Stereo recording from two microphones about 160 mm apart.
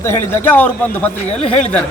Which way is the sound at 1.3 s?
45° left (ahead or behind).